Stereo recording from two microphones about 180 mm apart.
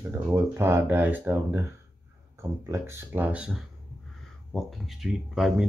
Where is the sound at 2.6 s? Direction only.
15° right (ahead or behind).